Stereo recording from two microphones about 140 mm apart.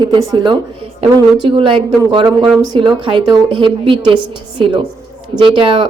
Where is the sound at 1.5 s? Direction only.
40° right (ahead or behind).